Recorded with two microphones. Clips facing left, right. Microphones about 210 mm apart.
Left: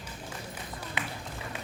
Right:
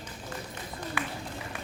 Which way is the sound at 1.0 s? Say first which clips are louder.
Right 2 dB; 20° left (ahead or behind).